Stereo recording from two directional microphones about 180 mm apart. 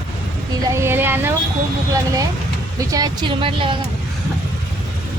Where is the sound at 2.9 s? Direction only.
20° right (ahead or behind).